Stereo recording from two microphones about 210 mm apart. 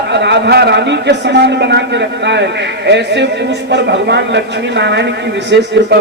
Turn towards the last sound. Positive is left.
turn(degrees=-55)  # may be behind; listen again after turning